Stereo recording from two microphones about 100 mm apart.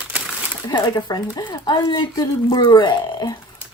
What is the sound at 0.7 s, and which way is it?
Speech, 45° left (ahead or behind).